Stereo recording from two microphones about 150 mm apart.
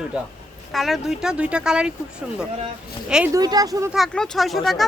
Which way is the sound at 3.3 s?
25° right (ahead or behind).